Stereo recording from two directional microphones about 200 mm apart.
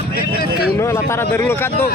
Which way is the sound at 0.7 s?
15° left (ahead or behind).